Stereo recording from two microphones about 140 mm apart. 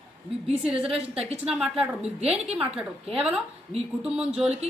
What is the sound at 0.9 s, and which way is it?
Speech, 45° right (ahead or behind).